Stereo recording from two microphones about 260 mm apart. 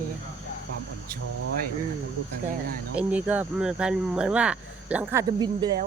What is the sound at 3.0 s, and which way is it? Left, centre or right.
Speech, centre.